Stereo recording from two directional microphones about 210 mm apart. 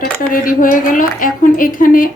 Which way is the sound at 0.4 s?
40° left (ahead or behind).